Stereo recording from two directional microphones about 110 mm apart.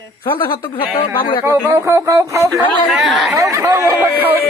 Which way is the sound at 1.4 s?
20° right (ahead or behind).